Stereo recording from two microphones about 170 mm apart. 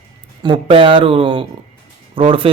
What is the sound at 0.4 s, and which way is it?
Speech, 30° right (ahead or behind).